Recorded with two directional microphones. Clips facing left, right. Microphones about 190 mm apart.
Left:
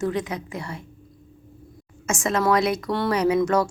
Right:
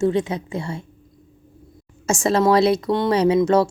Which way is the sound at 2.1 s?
30° right (ahead or behind).